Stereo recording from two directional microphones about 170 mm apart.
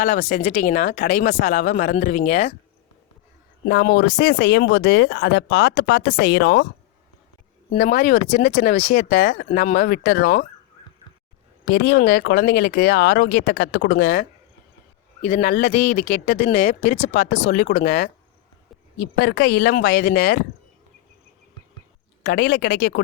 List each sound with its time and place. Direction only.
0.0 s speech: 45° left (ahead or behind)
3.7 s speech: 70° left (ahead or behind)
7.7 s speech: 50° left (ahead or behind)
11.6 s speech: 75° left (ahead or behind)
15.2 s speech: 50° left (ahead or behind)
17.5 s speech: 60° left (ahead or behind)
18.9 s speech: 75° left (ahead or behind); by 20.4 s 55° left (ahead or behind)
22.2 s speech: 65° left (ahead or behind)